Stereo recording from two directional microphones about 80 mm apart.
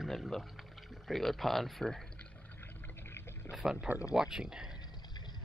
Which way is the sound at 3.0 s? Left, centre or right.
Left.